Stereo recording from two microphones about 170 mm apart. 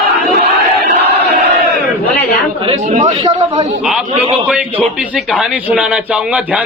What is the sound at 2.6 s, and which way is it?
Speech, 35° right (ahead or behind).